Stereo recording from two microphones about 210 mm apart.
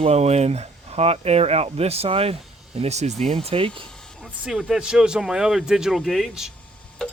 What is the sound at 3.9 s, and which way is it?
Speech, 5° left (ahead or behind).